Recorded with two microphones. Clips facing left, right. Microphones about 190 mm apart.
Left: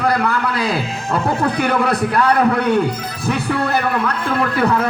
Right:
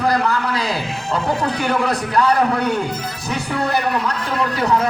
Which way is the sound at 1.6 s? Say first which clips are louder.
Left 2 dB; 60° left (ahead or behind).